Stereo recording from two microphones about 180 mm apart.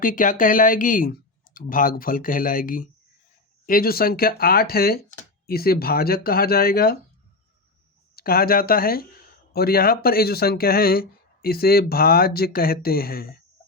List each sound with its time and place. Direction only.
0.0 s speech: 50° left (ahead or behind)
8.1 s speech: 55° left (ahead or behind)